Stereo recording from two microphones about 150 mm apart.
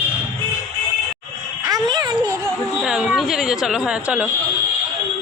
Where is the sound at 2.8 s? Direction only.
5° right (ahead or behind).